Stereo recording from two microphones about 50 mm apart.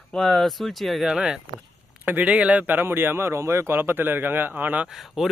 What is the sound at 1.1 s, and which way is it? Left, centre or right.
Speech, centre.